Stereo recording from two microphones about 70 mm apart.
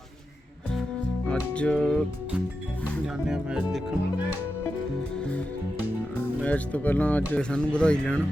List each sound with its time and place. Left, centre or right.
1.3 s music: centre
3.2 s speech: centre
6.4 s speech: left